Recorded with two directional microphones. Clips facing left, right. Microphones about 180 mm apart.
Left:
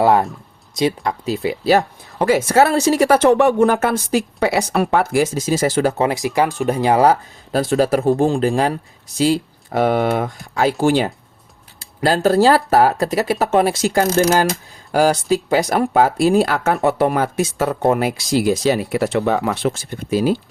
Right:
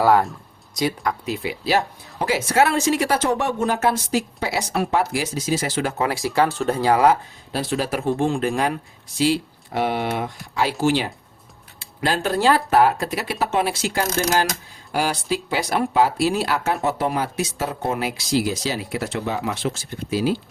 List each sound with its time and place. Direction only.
0.0 s speech: 25° left (ahead or behind); by 3.1 s 40° left (ahead or behind)
3.1 s speech: 65° left (ahead or behind); by 5.9 s 45° left (ahead or behind)
6.0 s speech: 20° left (ahead or behind)
7.0 s speech: 40° left (ahead or behind)